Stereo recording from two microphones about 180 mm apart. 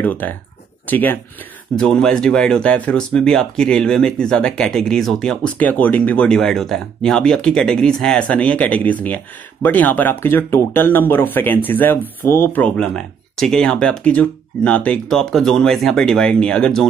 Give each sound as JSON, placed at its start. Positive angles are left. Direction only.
{"t": 0.0, "sound": "speech", "side_deg": 10}